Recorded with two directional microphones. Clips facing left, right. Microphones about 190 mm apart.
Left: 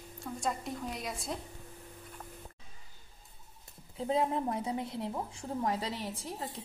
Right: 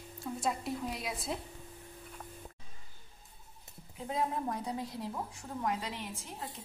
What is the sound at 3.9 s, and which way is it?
A woman's voice, 25° left (ahead or behind).